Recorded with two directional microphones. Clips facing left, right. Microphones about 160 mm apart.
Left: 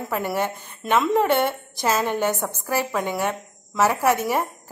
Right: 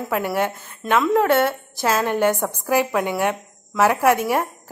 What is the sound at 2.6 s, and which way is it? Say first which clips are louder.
A woman's voice: right 5 dB; 10° right (ahead or behind).